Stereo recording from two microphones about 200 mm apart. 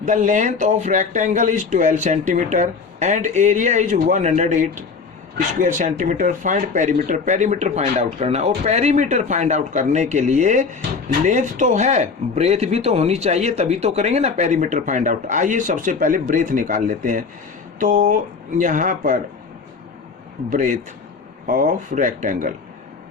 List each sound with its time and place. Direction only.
0.0 s speech: 40° right (ahead or behind)
20.5 s speech: 40° right (ahead or behind)